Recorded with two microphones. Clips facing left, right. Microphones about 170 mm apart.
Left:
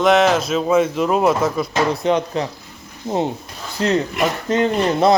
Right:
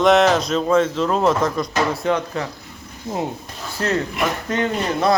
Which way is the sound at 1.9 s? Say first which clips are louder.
Left 3 dB; 20° left (ahead or behind).